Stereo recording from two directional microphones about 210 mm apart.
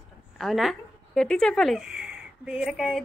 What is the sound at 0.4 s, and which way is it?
Speech, centre (ahead or behind).